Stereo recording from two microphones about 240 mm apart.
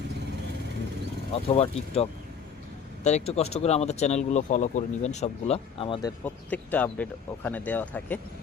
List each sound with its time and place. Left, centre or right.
1.3 s speech: left; by 8.2 s centre